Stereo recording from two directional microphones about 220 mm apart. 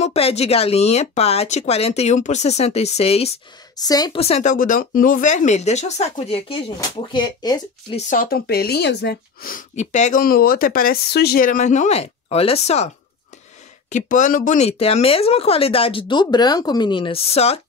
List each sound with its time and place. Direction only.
0.0 s speech: 25° left (ahead or behind)
8.1 s speech: 40° left (ahead or behind)